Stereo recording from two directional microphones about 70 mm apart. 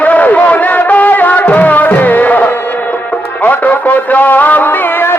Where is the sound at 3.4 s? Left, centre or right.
Left.